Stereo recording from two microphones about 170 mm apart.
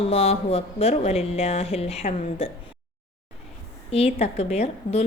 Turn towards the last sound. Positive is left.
turn(degrees=40)  # may be behind; listen again after turning